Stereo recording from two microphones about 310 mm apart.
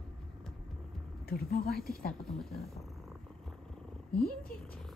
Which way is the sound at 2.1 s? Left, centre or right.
Centre.